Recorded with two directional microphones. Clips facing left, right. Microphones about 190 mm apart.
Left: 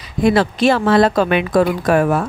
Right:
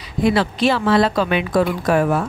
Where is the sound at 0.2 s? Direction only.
45° left (ahead or behind).